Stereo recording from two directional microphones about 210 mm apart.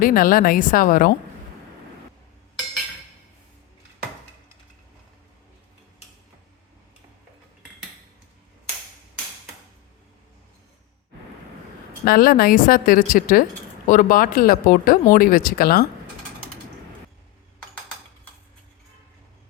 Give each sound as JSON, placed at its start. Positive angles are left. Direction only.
{"t": 0.0, "sound": "a woman's voice", "side_deg": 40}
{"t": 12.0, "sound": "speech", "side_deg": 45}